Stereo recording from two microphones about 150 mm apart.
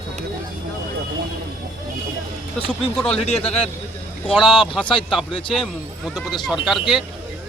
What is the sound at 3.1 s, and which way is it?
Speech, 45° left (ahead or behind).